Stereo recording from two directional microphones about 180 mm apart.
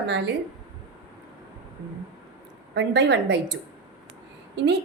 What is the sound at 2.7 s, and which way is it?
A woman's voice, 70° right (ahead or behind).